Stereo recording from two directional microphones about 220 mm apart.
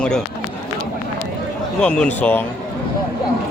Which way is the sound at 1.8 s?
5° left (ahead or behind).